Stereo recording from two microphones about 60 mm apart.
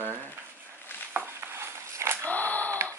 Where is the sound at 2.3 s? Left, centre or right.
Left.